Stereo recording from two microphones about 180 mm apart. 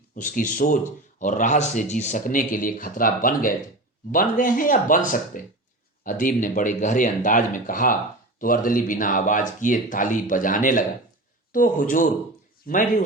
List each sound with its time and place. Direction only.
0.2 s speech: 50° left (ahead or behind)